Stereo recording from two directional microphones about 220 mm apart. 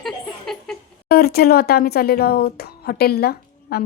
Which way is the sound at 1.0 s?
45° left (ahead or behind).